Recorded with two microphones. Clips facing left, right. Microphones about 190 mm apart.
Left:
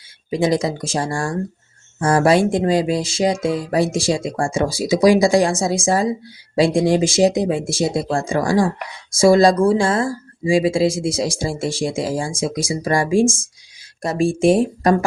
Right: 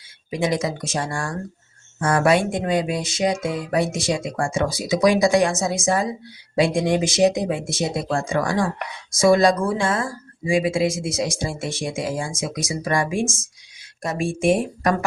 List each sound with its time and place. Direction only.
0.3 s speech: 35° left (ahead or behind)